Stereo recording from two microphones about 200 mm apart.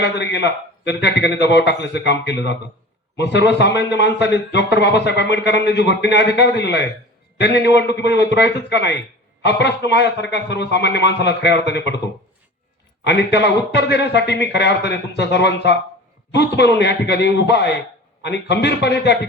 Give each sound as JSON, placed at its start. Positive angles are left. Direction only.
{"t": 0.0, "sound": "a man's voice", "side_deg": 60}
{"t": 13.1, "sound": "a man's voice", "side_deg": 60}